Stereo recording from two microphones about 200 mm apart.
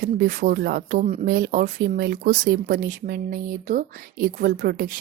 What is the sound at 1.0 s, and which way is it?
Speech, 40° right (ahead or behind).